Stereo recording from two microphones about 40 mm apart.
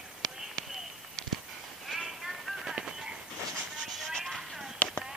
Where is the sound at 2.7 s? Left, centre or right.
Centre.